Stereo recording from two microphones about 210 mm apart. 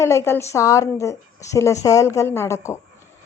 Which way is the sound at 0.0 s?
10° left (ahead or behind).